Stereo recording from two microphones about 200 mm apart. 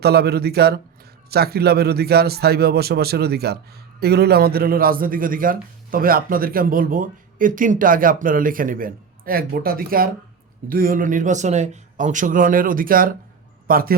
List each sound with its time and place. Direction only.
0.0 s a man's voice: 50° right (ahead or behind)